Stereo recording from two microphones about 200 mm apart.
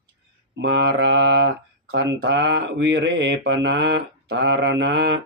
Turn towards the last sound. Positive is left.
turn(degrees=-65)  # may be behind; listen again after turning